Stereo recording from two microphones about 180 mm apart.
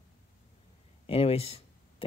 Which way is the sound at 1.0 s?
30° left (ahead or behind).